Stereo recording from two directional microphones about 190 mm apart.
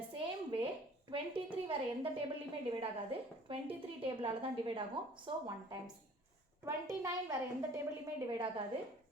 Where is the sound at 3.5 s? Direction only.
25° right (ahead or behind).